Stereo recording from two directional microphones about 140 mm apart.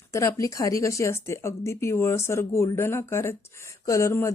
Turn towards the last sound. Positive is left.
turn(degrees=20)  # may be behind; listen again after turning